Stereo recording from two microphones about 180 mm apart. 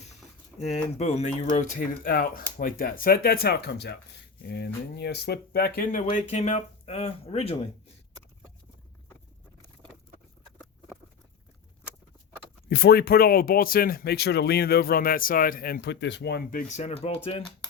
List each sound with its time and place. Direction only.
0.6 s speech: 40° left (ahead or behind)
12.6 s speech: 65° left (ahead or behind); by 17.2 s 35° left (ahead or behind)